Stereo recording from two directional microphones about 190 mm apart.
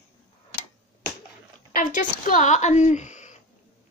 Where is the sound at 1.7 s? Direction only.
45° left (ahead or behind).